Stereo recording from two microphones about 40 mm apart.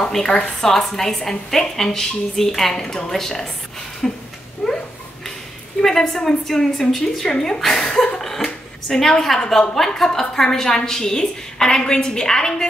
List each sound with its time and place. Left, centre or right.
0.3 s a woman's voice: centre
4.6 s a sound: centre
5.8 s a woman's voice: centre
7.2 s a woman's voice: left
7.7 s chuckle: centre
8.8 s a woman's voice: centre